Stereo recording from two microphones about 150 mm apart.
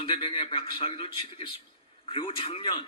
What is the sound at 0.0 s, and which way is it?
A man's voice, 35° left (ahead or behind).